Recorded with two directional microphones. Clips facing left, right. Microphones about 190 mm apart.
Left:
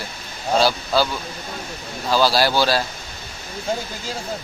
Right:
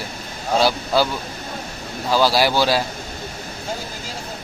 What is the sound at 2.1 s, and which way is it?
Speech, 15° right (ahead or behind).